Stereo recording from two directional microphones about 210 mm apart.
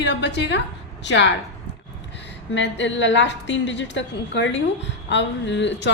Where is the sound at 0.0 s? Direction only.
55° left (ahead or behind).